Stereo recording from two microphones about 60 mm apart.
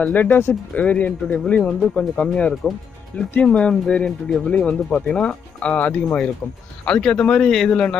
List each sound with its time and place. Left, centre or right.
0.0 s speech: left
0.7 s speech: left